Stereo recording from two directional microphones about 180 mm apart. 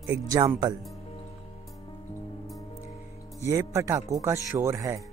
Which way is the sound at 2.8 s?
15° left (ahead or behind).